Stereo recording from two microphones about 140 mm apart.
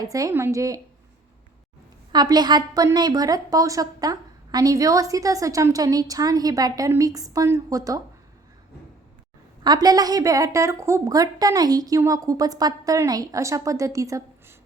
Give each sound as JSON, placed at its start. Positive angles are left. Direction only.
{"t": 0.0, "sound": "a woman's voice", "side_deg": -25}
{"t": 2.1, "sound": "a woman's voice", "side_deg": -30}
{"t": 9.6, "sound": "a woman's voice", "side_deg": -30}